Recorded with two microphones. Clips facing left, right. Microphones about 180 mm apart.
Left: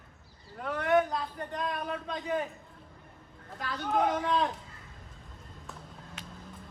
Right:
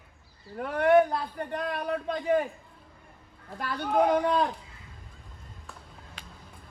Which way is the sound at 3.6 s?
55° right (ahead or behind).